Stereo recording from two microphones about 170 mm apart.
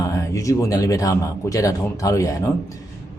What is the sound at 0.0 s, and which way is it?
Speech, 20° left (ahead or behind).